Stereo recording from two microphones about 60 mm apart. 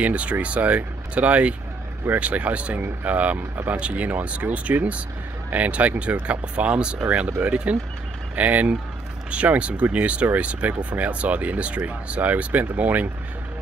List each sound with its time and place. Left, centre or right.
0.0 s speech: right